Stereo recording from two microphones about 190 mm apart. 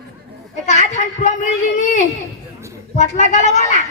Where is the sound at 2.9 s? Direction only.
40° left (ahead or behind).